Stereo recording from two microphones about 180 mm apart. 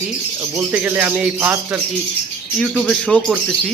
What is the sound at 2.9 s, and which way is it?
Speech, 5° left (ahead or behind).